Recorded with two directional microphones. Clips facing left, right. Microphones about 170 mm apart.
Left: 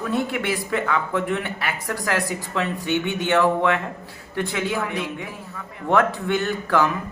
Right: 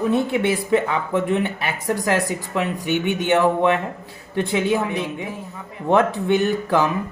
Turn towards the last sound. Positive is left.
turn(degrees=-20)  # may be behind; listen again after turning